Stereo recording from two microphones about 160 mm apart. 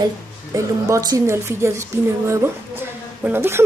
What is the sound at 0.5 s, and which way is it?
A woman's voice, 20° right (ahead or behind).